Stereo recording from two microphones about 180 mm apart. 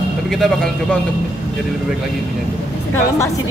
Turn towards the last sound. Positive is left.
turn(degrees=15)  # may be behind; listen again after turning